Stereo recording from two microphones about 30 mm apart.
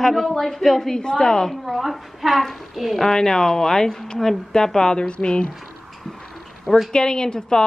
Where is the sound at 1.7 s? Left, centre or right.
Centre.